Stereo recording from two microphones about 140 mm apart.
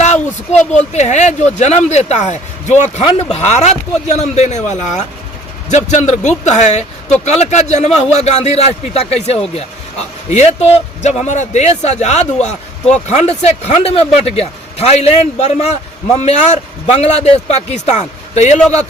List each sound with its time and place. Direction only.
0.9 s speech: 55° left (ahead or behind)
3.0 s speech: 40° left (ahead or behind); by 18.6 s 55° left (ahead or behind)